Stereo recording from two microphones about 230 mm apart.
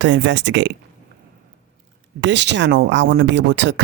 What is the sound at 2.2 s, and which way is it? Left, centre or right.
Speech, right.